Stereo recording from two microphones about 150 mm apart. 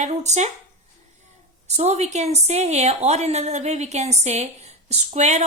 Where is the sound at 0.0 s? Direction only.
50° right (ahead or behind).